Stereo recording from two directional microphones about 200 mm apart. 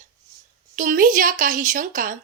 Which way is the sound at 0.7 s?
40° right (ahead or behind).